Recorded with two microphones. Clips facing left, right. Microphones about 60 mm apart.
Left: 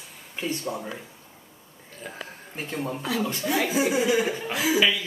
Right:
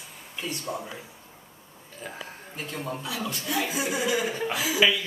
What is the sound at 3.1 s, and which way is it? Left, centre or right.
Speech, left.